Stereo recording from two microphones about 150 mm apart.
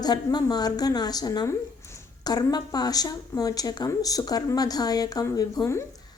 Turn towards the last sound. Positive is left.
turn(degrees=20)  # may be behind; listen again after turning